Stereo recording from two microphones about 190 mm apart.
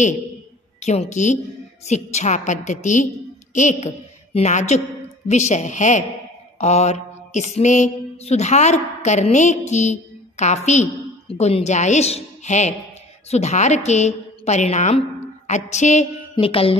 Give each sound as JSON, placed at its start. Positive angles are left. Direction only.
{"t": 0.7, "sound": "a woman's voice", "side_deg": 35}
{"t": 6.6, "sound": "a sound", "side_deg": 35}
{"t": 13.3, "sound": "a woman's voice", "side_deg": 35}